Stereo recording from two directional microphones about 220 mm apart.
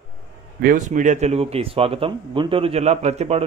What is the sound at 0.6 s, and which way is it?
Speech, 35° right (ahead or behind).